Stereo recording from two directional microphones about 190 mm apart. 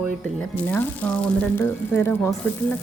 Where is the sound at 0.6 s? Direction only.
10° left (ahead or behind).